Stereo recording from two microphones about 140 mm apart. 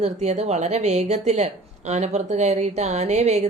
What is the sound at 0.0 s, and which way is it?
Speech, 50° right (ahead or behind).